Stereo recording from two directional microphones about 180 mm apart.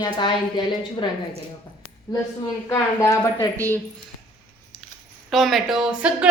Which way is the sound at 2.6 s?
15° left (ahead or behind).